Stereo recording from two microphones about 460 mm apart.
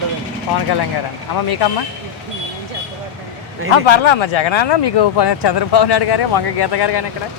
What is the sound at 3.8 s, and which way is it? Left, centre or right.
Speech, left.